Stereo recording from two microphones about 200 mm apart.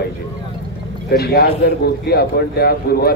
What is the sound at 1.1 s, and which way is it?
A man's voice, 50° left (ahead or behind).